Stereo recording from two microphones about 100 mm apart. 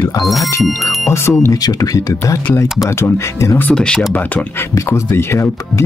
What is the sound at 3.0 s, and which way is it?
Speech, 25° left (ahead or behind).